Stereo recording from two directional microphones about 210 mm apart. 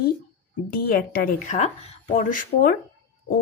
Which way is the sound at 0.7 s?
45° left (ahead or behind).